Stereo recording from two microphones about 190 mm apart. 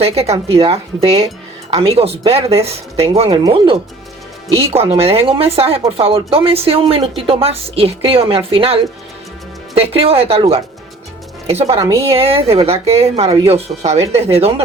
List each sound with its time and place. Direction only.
0.0 s speech: 30° right (ahead or behind)
4.9 s speech: 30° right (ahead or behind)
11.8 s speech: 15° right (ahead or behind)
12.0 s speech: 30° right (ahead or behind)